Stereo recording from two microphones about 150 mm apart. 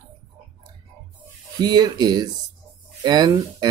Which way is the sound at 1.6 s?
30° right (ahead or behind).